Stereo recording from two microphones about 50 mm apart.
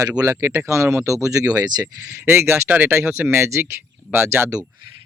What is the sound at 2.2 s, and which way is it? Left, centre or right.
Speech, right.